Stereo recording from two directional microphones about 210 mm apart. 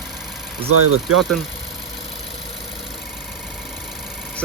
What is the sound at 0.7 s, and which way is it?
Speech, 90° right.